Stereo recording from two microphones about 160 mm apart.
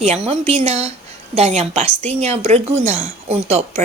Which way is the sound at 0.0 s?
40° right (ahead or behind).